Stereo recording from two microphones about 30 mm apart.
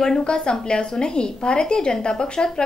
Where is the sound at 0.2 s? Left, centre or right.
Left.